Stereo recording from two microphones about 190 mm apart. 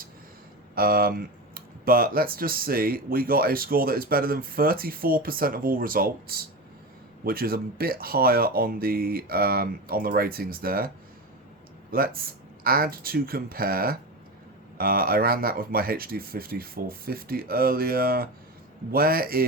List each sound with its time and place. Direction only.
0.8 s speech: 55° right (ahead or behind)